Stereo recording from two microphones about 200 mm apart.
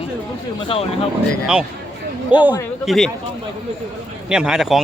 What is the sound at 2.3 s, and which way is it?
Speech, 10° right (ahead or behind).